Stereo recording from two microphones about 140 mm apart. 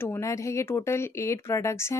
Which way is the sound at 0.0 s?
20° left (ahead or behind).